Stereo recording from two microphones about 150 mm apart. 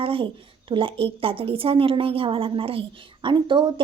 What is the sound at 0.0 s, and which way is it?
A woman's voice, 35° right (ahead or behind).